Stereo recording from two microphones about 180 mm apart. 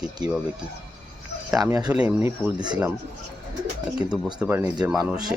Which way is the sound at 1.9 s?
5° right (ahead or behind).